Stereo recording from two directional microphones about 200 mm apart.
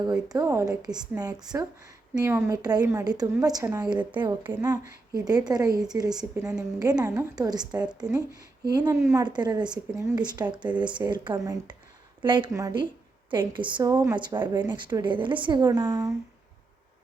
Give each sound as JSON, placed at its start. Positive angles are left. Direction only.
{"t": 0.0, "sound": "speech", "side_deg": -20}
{"t": 6.3, "sound": "a woman's voice", "side_deg": -5}
{"t": 6.7, "sound": "speech", "side_deg": -20}